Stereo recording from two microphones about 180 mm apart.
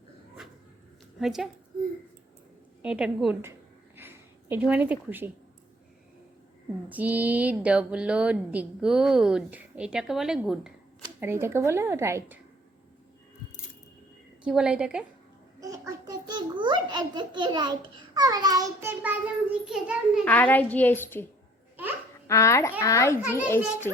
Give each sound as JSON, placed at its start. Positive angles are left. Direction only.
{"t": 1.2, "sound": "a woman's voice", "side_deg": 0}
{"t": 2.8, "sound": "a woman's voice", "side_deg": -5}
{"t": 3.9, "sound": "a sound", "side_deg": -10}
{"t": 6.8, "sound": "a woman's voice", "side_deg": -10}
{"t": 11.2, "sound": "a woman's voice", "side_deg": -15}
{"t": 14.4, "sound": "a woman's voice", "side_deg": -5}
{"t": 15.6, "sound": "a child's voice", "side_deg": -20}
{"t": 20.2, "sound": "a woman's voice", "side_deg": 10}
{"t": 22.3, "sound": "a woman's voice", "side_deg": 15}